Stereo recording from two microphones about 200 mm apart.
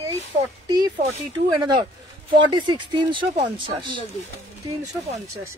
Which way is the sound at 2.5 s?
25° right (ahead or behind).